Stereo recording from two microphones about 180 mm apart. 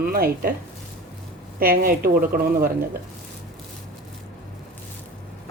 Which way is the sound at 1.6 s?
55° right (ahead or behind).